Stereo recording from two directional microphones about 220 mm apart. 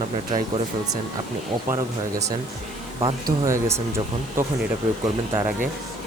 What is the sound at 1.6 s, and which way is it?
Speech, 15° right (ahead or behind).